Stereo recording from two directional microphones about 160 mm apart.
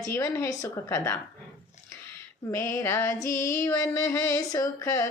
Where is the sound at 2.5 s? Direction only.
20° left (ahead or behind).